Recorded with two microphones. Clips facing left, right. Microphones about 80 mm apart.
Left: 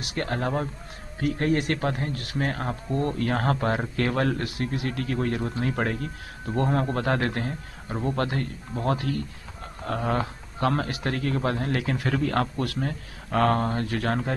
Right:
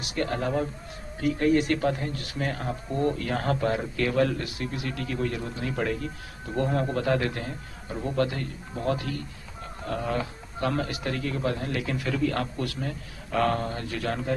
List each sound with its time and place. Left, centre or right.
0.0 s a man's voice: left